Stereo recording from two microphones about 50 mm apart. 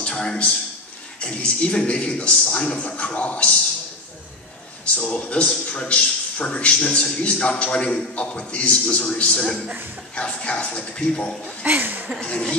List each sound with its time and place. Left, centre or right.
0.0 s a sound: centre
1.2 s a man's voice: left
4.9 s a man's voice: left
11.6 s speech: right
12.2 s speech: centre